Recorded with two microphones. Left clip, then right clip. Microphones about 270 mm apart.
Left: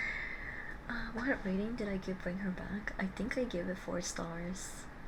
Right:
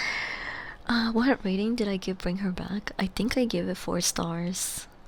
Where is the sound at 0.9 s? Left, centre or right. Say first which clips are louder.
Right 12 dB; right.